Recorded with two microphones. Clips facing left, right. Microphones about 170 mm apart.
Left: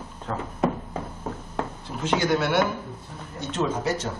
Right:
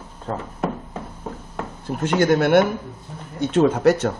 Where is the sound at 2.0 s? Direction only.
50° right (ahead or behind).